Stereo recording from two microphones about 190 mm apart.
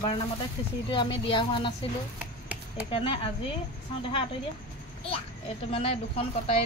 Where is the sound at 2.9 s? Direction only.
30° left (ahead or behind).